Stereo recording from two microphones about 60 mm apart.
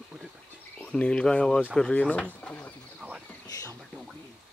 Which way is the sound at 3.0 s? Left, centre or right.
Centre.